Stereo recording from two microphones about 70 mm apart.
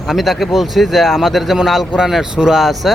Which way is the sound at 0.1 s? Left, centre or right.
Centre.